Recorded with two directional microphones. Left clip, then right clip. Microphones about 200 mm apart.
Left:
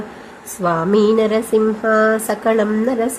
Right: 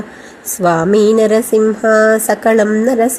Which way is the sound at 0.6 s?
20° right (ahead or behind).